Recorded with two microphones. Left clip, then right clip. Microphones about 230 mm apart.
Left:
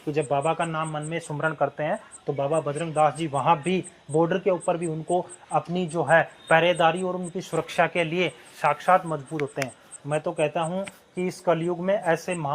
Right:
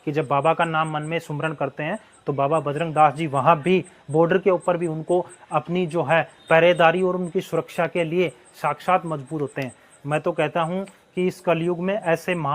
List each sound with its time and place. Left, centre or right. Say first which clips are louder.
0.1 s speech: right 4 dB; right